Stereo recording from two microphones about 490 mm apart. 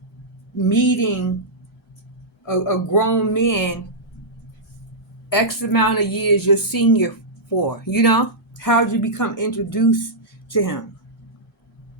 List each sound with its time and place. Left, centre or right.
0.5 s speech: left
2.6 s speech: left
5.3 s a woman's voice: left